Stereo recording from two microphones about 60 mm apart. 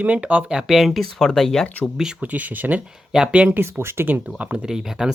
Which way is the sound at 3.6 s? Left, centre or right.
Right.